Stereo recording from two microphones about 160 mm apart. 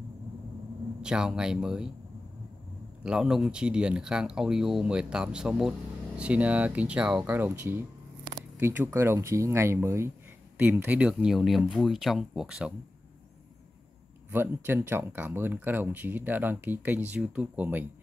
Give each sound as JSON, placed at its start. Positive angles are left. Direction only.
{"t": 1.0, "sound": "speech", "side_deg": -5}
{"t": 3.0, "sound": "speech", "side_deg": -5}
{"t": 14.3, "sound": "speech", "side_deg": -15}